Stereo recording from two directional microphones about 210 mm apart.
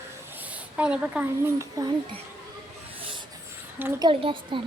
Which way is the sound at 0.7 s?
5° right (ahead or behind).